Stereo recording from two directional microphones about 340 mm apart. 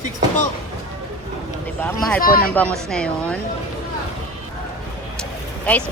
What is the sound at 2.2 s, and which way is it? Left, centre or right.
Speech, left.